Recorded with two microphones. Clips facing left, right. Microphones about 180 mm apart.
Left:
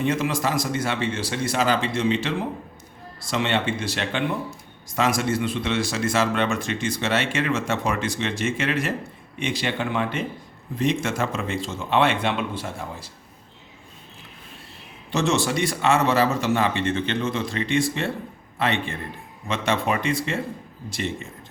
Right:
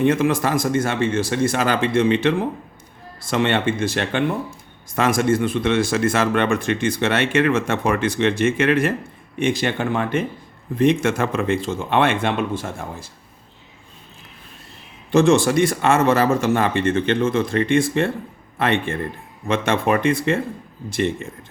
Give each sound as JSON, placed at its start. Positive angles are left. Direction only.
{"t": 0.0, "sound": "speech", "side_deg": -55}
{"t": 15.1, "sound": "speech", "side_deg": -50}